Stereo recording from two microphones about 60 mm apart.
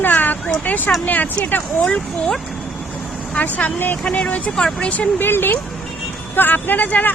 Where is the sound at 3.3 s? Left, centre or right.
Left.